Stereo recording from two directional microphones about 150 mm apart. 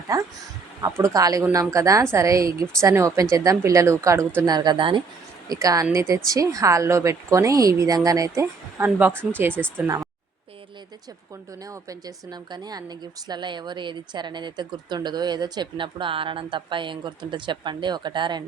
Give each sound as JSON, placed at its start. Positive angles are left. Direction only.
{"t": 0.1, "sound": "speech", "side_deg": -20}
{"t": 5.5, "sound": "speech", "side_deg": -25}
{"t": 11.6, "sound": "speech", "side_deg": -25}